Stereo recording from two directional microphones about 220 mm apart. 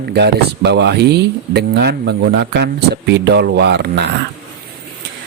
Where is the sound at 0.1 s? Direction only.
50° right (ahead or behind).